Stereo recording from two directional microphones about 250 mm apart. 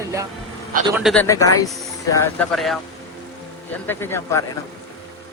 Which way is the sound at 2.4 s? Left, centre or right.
Centre.